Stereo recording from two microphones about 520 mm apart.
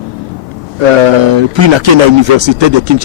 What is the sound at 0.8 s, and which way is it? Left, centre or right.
A man's voice, right.